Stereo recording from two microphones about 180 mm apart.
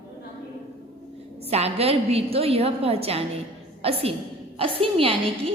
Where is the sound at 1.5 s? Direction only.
35° right (ahead or behind).